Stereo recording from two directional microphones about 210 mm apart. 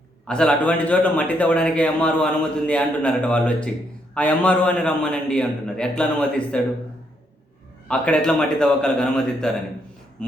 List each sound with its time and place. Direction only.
0.3 s a man's voice: 5° left (ahead or behind)
7.9 s a man's voice: 5° left (ahead or behind)
10.2 s a sound: 5° left (ahead or behind)